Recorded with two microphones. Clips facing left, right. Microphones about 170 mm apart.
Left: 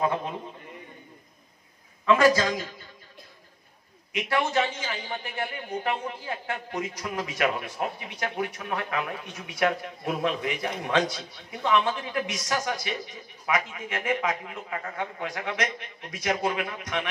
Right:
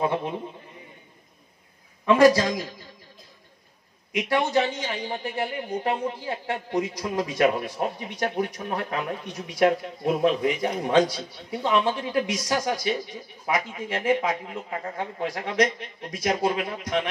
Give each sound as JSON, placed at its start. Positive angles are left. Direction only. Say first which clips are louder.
{"t": 2.1, "sound": "speech", "louder": "right 6 dB", "side_deg": -35}
{"t": 4.1, "sound": "speech", "louder": "right 3 dB", "side_deg": -35}